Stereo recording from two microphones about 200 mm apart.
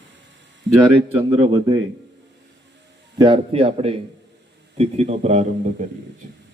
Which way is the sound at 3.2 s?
25° right (ahead or behind).